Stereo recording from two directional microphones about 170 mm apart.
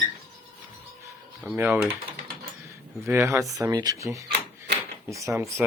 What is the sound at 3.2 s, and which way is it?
Speech, 20° right (ahead or behind).